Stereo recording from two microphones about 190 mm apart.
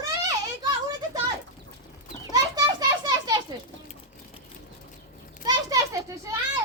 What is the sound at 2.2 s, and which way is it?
Children playing, 20° right (ahead or behind).